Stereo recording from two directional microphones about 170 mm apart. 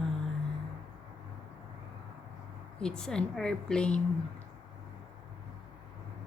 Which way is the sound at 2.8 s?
5° left (ahead or behind).